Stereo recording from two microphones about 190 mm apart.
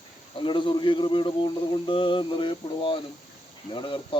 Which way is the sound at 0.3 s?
25° left (ahead or behind).